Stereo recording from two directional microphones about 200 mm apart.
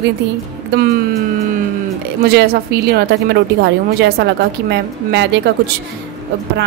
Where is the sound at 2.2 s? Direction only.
50° right (ahead or behind).